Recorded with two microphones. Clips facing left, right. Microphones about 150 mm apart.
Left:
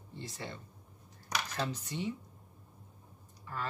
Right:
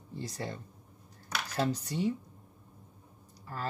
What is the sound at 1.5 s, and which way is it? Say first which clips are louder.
Speech: right 5 dB; 40° right (ahead or behind).